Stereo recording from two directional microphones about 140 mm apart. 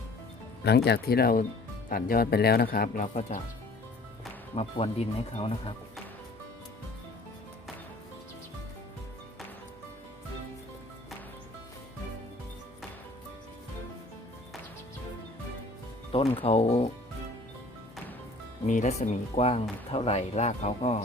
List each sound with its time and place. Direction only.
1.0 s speech: 90° left
3.2 s speech: 55° left (ahead or behind)
4.5 s speech: 45° left (ahead or behind)
16.1 s speech: 40° left (ahead or behind)
18.6 s speech: 60° left (ahead or behind)